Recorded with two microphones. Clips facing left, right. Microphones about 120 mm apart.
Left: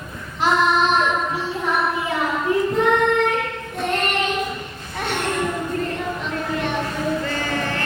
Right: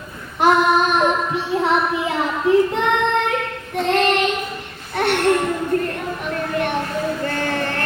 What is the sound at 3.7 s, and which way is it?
Child singing, 90° right.